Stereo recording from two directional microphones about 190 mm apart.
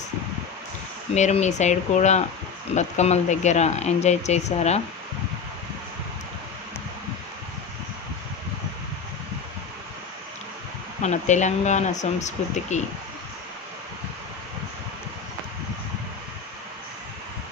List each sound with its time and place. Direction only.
1.1 s speech: 35° left (ahead or behind)
11.0 s speech: 40° left (ahead or behind)